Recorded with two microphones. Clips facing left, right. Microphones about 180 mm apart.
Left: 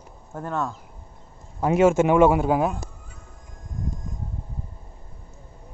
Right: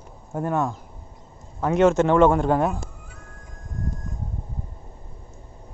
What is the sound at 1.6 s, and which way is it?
Speech, 5° left (ahead or behind).